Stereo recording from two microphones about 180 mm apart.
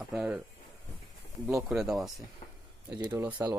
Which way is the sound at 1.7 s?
Centre (ahead or behind).